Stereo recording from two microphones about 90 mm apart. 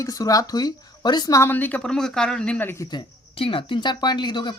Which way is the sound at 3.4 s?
85° left.